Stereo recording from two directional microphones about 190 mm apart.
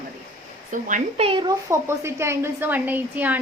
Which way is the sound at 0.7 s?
40° right (ahead or behind).